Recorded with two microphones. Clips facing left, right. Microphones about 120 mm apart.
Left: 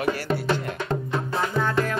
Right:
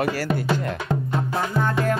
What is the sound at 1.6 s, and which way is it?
Music, 50° right (ahead or behind).